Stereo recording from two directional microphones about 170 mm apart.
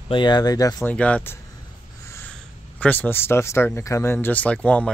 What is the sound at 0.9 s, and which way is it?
Speech, 10° left (ahead or behind).